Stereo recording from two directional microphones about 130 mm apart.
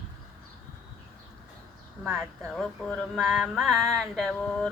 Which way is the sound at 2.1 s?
15° right (ahead or behind).